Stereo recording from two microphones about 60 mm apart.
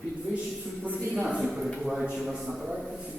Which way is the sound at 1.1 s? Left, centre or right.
Centre.